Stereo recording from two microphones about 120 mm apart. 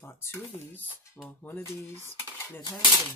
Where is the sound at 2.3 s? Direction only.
20° left (ahead or behind).